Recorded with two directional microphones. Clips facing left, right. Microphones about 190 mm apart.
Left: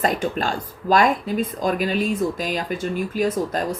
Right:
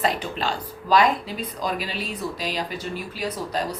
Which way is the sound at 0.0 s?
45° left (ahead or behind).